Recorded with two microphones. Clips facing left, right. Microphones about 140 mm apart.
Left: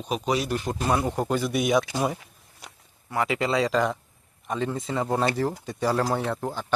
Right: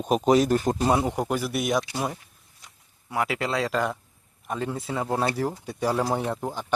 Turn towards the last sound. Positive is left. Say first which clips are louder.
# even
turn(degrees=-10)  # may be behind; listen again after turning